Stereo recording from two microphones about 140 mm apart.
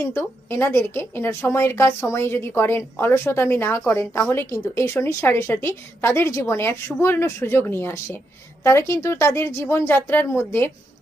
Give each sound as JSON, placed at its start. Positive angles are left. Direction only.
{"t": 0.0, "sound": "a woman's voice", "side_deg": 20}